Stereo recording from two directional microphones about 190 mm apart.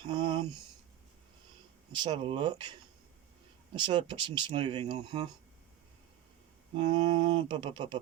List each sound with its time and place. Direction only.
0.0 s speech: 25° right (ahead or behind)
1.9 s speech: 25° right (ahead or behind)
3.8 s speech: 25° right (ahead or behind)
6.7 s speech: 25° right (ahead or behind)